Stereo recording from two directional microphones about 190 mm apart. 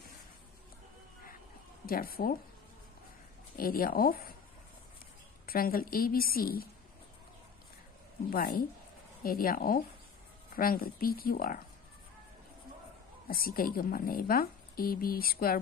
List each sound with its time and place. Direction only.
1.9 s a woman's voice: 50° left (ahead or behind)
3.5 s speech: 50° left (ahead or behind)
5.5 s a woman's voice: 50° left (ahead or behind)
9.2 s a woman's voice: 50° left (ahead or behind)
13.3 s a woman's voice: 50° left (ahead or behind)